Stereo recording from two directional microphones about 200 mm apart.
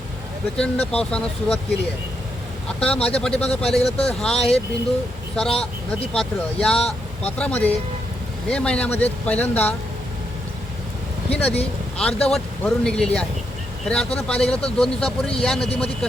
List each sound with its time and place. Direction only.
0.5 s speech: 5° left (ahead or behind)
2.8 s speech: 5° left (ahead or behind)
4.4 s speech: 30° left (ahead or behind)
6.1 s speech: 5° left (ahead or behind)
11.3 s speech: 5° left (ahead or behind)